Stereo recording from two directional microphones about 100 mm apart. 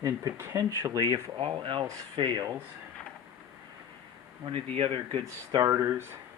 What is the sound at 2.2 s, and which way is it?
Speech, 45° right (ahead or behind).